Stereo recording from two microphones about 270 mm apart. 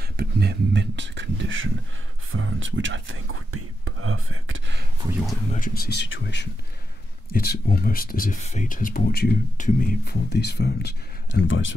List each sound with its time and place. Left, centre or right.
0.2 s speech: right
5.5 s speech: left